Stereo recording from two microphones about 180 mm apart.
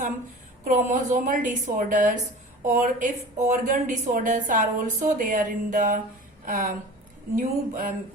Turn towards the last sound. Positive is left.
turn(degrees=-45)  # may be behind; listen again after turning